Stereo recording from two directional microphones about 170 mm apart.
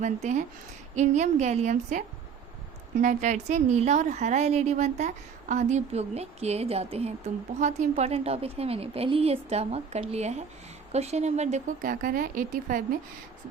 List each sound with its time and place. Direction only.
0.0 s a woman's voice: 45° right (ahead or behind)